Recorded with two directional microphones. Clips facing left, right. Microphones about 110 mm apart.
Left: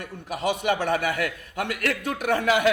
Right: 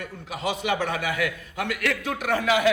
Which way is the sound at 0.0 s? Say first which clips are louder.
Left 2 dB; 50° left (ahead or behind).